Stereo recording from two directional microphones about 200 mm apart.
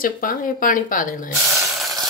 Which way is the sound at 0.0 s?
45° left (ahead or behind).